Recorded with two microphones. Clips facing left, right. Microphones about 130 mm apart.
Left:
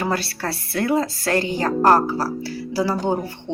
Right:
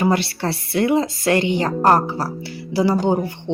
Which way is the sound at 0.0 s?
20° right (ahead or behind).